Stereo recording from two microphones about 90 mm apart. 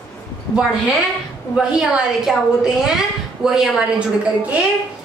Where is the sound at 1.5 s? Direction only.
10° right (ahead or behind).